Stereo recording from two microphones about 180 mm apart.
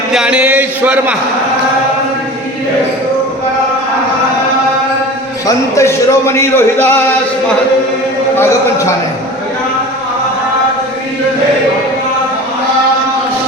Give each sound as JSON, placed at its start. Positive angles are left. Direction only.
{"t": 0.1, "sound": "speech", "side_deg": -5}
{"t": 5.5, "sound": "speech", "side_deg": 15}
{"t": 8.4, "sound": "speech", "side_deg": 15}